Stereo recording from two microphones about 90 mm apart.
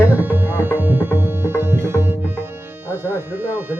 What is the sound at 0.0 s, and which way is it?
Tabla, 20° right (ahead or behind).